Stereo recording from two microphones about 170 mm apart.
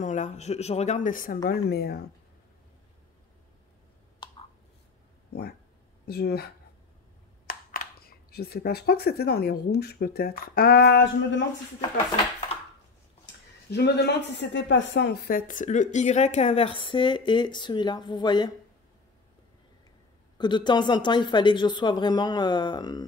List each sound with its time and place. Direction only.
0.0 s speech: 45° left (ahead or behind); by 2.0 s 70° left (ahead or behind)
6.0 s speech: 65° left (ahead or behind)
13.7 s speech: 75° left (ahead or behind)
15.3 s a woman's voice: 50° left (ahead or behind); by 18.5 s 25° left (ahead or behind)
20.3 s a woman's voice: 25° left (ahead or behind)